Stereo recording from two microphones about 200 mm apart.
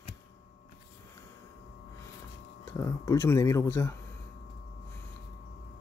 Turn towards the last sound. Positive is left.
turn(degrees=15)  # may be behind; listen again after turning